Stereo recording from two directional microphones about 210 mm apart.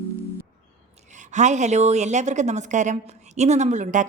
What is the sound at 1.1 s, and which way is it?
A woman's voice, 35° right (ahead or behind).